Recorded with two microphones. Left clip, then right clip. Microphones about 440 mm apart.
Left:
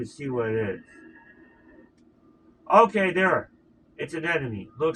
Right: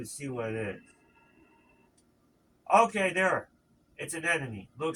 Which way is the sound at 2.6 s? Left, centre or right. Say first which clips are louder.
Left 5 dB; right.